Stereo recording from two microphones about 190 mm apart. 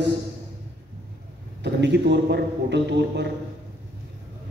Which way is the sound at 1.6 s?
65° right (ahead or behind).